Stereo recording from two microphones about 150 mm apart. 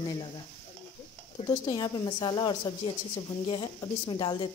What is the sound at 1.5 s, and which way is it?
Speech, 30° left (ahead or behind).